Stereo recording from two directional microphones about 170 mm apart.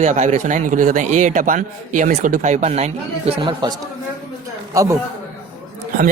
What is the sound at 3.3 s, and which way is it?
A man's voice, 25° right (ahead or behind).